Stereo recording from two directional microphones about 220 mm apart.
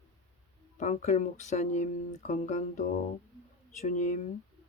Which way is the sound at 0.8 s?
30° left (ahead or behind).